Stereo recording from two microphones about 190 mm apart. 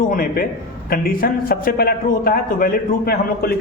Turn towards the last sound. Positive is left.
turn(degrees=55)  # may be behind; listen again after turning